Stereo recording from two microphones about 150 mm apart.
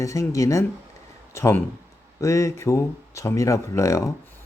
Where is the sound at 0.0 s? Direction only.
20° left (ahead or behind).